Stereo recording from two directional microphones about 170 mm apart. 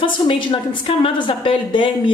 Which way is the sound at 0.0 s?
30° left (ahead or behind).